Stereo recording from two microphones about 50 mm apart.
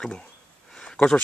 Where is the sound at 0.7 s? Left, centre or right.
Centre.